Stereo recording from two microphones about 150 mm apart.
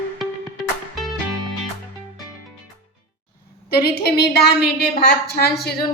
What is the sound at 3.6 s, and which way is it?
A woman's voice, 90° left.